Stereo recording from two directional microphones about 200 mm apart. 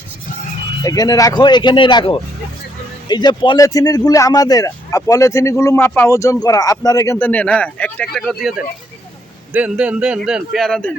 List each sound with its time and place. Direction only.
0.9 s a man's voice: 20° left (ahead or behind)